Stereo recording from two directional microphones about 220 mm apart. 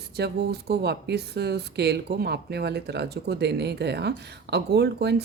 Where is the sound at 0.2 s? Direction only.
50° right (ahead or behind).